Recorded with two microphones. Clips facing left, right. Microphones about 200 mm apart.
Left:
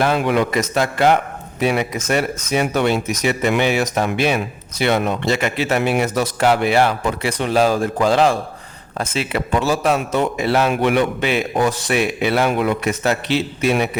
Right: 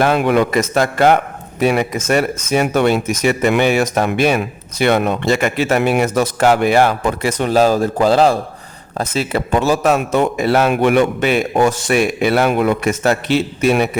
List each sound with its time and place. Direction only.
0.0 s a man's voice: 55° right (ahead or behind)